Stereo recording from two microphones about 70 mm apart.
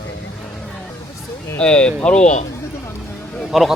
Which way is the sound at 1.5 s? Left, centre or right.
Centre.